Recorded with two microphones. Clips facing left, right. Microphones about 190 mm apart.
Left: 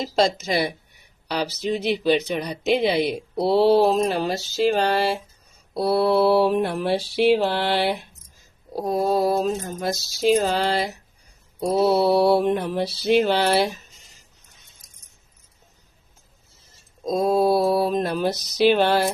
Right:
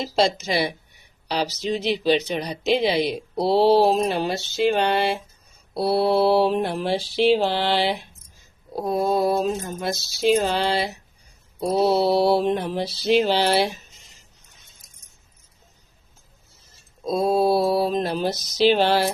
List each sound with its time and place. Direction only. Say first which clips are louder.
0.3 s mantra: even; 45° left (ahead or behind)
3.3 s a sound: even; 55° left (ahead or behind)
5.7 s mantra: left 1 dB; 50° left (ahead or behind)
8.7 s a sound: even; 40° left (ahead or behind)
11.8 s mantra: left 1 dB; 55° left (ahead or behind)
17.1 s mantra: even; 45° left (ahead or behind)